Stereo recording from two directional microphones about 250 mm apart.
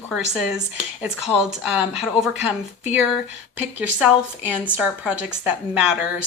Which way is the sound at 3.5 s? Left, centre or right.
Centre.